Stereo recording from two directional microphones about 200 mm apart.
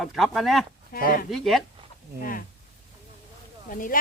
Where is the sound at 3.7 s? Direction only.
45° left (ahead or behind).